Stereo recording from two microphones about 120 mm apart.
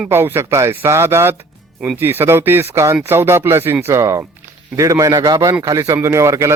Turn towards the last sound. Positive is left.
turn(degrees=-25)  # may be behind; listen again after turning